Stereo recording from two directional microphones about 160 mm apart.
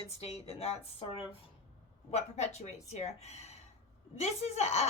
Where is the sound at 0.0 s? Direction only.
40° left (ahead or behind).